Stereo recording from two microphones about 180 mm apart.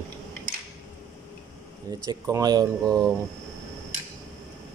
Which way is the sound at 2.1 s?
20° right (ahead or behind).